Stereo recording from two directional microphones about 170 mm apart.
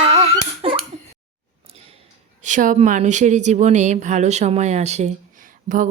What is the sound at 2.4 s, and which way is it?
A woman's voice, 50° right (ahead or behind).